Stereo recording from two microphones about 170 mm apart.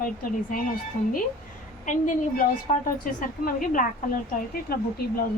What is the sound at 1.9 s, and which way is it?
A woman's voice, 50° left (ahead or behind).